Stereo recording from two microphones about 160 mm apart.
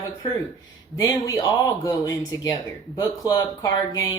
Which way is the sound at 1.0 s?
20° left (ahead or behind).